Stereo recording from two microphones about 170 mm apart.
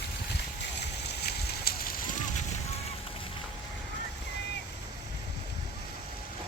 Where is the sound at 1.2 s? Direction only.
65° left (ahead or behind).